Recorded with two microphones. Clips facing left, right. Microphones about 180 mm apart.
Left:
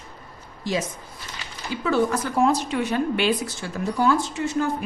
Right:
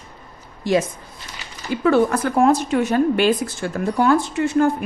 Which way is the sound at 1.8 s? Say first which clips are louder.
Right 5 dB; 60° right (ahead or behind).